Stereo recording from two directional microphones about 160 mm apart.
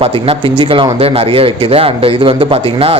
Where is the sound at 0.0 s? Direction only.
35° right (ahead or behind).